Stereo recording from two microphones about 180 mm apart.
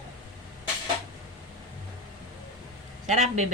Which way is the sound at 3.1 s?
40° right (ahead or behind).